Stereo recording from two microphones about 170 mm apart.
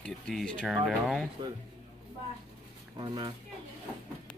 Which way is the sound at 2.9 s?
25° right (ahead or behind).